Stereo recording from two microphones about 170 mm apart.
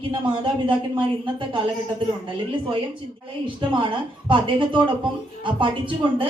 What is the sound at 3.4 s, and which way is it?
Speech, 30° right (ahead or behind).